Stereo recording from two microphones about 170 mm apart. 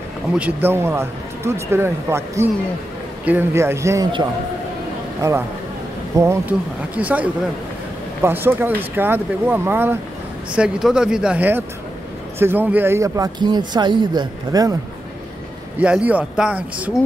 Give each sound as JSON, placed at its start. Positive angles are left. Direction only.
{"t": 0.4, "sound": "speech", "side_deg": -10}
{"t": 6.1, "sound": "speech", "side_deg": -15}
{"t": 15.8, "sound": "speech", "side_deg": -10}